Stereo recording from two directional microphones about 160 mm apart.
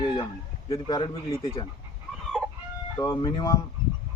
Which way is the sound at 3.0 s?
25° left (ahead or behind).